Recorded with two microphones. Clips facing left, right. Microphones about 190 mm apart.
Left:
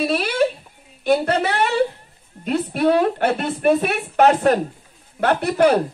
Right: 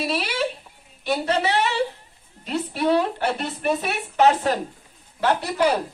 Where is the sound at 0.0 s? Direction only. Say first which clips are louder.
Left 6 dB; 55° left (ahead or behind).